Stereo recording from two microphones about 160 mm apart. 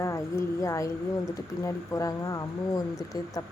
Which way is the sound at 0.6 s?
20° left (ahead or behind).